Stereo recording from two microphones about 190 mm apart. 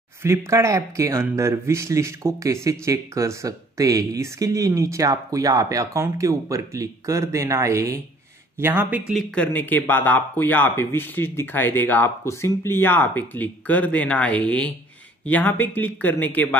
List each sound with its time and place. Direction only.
0.2 s speech: 15° right (ahead or behind); by 16.4 s 10° left (ahead or behind)